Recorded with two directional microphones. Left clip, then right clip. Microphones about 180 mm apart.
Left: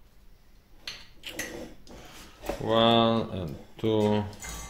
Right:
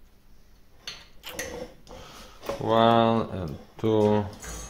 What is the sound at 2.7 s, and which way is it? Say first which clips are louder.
Speech: right 2 dB; 5° right (ahead or behind).